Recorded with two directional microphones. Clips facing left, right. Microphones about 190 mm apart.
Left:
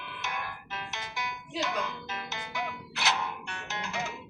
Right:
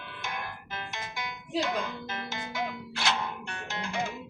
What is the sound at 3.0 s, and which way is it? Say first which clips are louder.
Music: even; 30° right (ahead or behind).